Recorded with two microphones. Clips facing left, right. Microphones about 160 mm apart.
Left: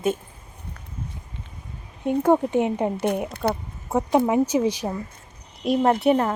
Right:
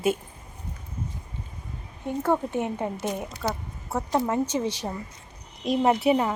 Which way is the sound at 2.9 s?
60° left (ahead or behind).